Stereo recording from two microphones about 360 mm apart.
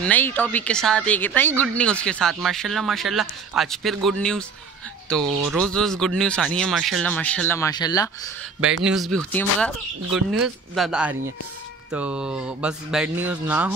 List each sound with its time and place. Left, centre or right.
0.0 s a woman's voice: centre
8.8 s a woman's voice: centre